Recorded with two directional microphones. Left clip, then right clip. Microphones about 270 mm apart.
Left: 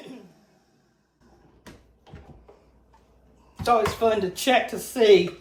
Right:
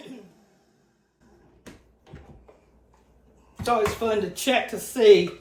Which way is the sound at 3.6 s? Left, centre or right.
Centre.